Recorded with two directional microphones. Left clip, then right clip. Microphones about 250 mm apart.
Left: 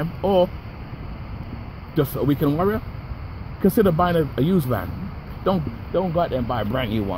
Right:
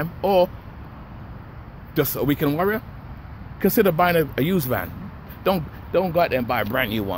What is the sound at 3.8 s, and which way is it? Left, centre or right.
Speech, centre.